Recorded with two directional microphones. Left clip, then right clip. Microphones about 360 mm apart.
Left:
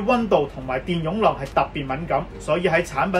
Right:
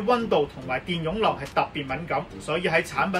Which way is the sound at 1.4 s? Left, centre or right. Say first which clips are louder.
Left 4 dB; centre.